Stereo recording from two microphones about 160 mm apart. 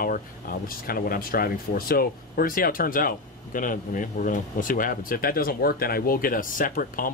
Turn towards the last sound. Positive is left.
turn(degrees=60)  # may be behind; listen again after turning